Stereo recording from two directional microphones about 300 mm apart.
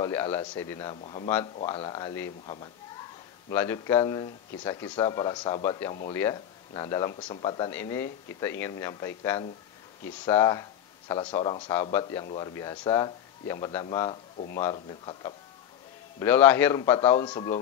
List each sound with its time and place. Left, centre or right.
0.0 s speech: centre